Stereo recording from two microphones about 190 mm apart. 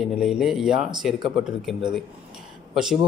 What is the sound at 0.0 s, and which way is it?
Speech, centre (ahead or behind).